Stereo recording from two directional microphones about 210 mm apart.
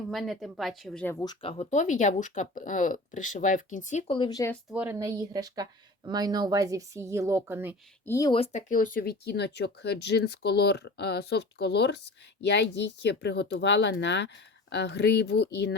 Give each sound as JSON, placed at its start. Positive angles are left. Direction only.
{"t": 0.1, "sound": "speech", "side_deg": 0}
{"t": 1.2, "sound": "speech", "side_deg": 25}
{"t": 4.7, "sound": "a woman's voice", "side_deg": -10}
{"t": 8.0, "sound": "speech", "side_deg": 15}
{"t": 8.4, "sound": "speech", "side_deg": 35}